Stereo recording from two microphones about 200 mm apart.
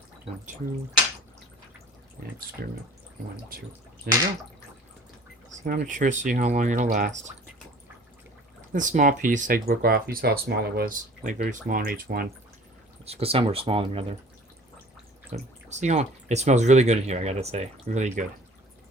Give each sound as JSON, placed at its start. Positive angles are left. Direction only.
{"t": 2.6, "sound": "speech", "side_deg": -50}
{"t": 4.1, "sound": "speech", "side_deg": -50}
{"t": 5.7, "sound": "speech", "side_deg": -40}
{"t": 8.7, "sound": "speech", "side_deg": -40}
{"t": 13.1, "sound": "speech", "side_deg": -30}
{"t": 15.3, "sound": "speech", "side_deg": -35}